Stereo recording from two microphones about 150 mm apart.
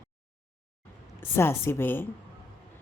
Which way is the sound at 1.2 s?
15° left (ahead or behind).